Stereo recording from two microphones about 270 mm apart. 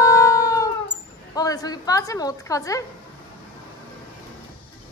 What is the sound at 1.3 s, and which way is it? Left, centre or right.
A woman's voice, centre.